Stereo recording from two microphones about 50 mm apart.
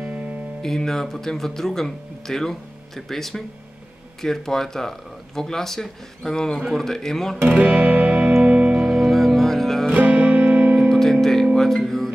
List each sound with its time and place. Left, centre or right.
0.0 s music: right
0.6 s speech: centre
7.4 s music: right
8.7 s music: centre
9.9 s music: right
10.9 s music: centre